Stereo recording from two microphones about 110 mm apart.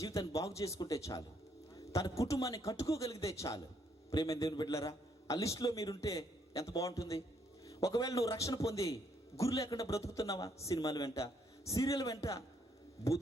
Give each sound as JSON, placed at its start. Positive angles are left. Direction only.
{"t": 0.0, "sound": "a man's voice", "side_deg": 30}